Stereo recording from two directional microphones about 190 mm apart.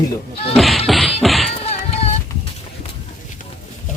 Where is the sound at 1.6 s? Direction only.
35° left (ahead or behind).